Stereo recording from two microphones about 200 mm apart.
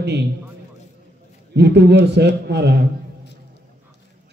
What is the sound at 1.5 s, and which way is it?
A man's voice, 55° right (ahead or behind).